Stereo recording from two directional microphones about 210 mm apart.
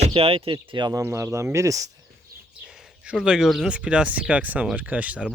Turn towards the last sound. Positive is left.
turn(degrees=-5)  # may be behind; listen again after turning